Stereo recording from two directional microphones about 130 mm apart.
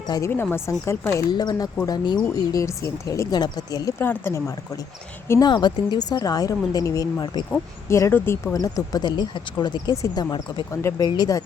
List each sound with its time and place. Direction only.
0.3 s speech: 20° left (ahead or behind)
3.9 s speech: 15° left (ahead or behind)
5.3 s speech: 30° left (ahead or behind)